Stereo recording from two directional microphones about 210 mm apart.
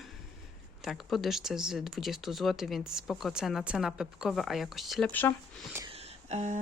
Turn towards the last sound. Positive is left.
turn(degrees=-30)  # may be behind; listen again after turning